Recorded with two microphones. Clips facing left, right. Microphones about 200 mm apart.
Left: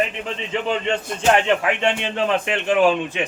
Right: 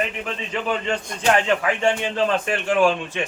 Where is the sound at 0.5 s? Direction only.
25° left (ahead or behind).